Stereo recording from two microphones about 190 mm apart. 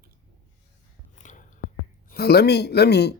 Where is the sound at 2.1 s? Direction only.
55° left (ahead or behind).